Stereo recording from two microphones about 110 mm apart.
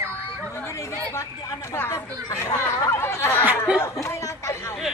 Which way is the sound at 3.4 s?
10° right (ahead or behind).